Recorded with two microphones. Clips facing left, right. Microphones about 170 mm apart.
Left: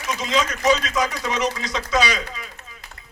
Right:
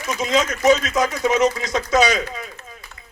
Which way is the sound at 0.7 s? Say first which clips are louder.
Right 4 dB; 50° right (ahead or behind).